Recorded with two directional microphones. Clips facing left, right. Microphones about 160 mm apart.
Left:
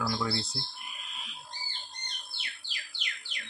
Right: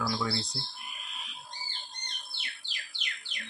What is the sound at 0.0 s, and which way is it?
Speech, 5° left (ahead or behind).